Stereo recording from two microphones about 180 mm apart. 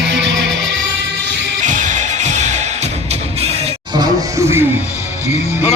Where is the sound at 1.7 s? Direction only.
45° right (ahead or behind).